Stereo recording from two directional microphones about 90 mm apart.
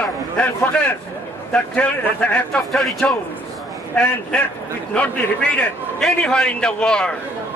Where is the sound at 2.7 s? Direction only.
5° left (ahead or behind).